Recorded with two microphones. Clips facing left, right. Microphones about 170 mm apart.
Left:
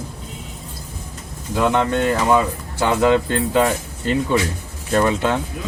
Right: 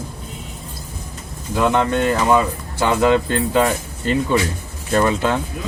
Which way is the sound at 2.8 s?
20° left (ahead or behind).